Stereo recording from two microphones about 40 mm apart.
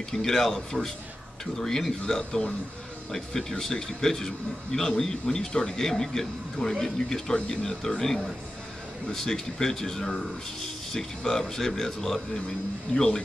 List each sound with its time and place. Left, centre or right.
0.1 s a man's voice: centre
9.1 s a man's voice: centre